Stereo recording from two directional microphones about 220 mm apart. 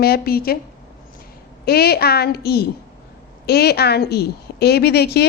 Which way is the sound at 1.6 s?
45° left (ahead or behind).